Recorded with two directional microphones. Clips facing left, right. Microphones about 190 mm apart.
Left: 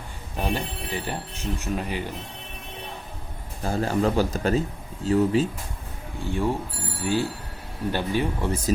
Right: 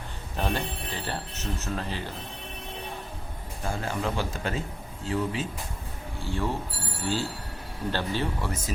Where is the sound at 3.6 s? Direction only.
40° left (ahead or behind).